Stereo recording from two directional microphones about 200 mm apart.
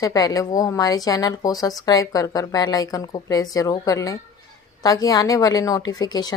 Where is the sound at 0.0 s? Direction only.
15° left (ahead or behind).